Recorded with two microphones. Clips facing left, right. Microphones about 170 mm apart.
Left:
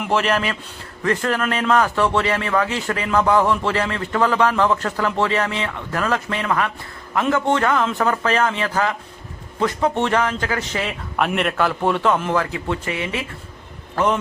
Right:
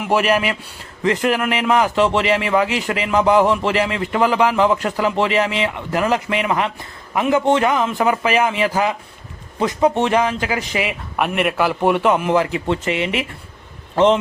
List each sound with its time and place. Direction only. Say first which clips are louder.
0.1 s a man's voice: right 3 dB; 15° right (ahead or behind)